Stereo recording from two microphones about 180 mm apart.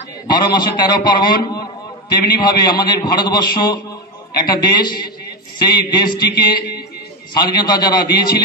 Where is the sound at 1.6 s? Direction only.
20° left (ahead or behind).